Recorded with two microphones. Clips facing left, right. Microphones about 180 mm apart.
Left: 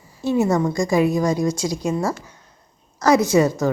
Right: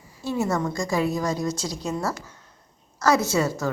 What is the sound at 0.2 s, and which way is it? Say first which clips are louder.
A woman's voice: left 6 dB; 20° left (ahead or behind).